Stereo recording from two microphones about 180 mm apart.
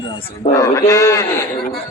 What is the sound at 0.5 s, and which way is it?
Speech, 20° left (ahead or behind).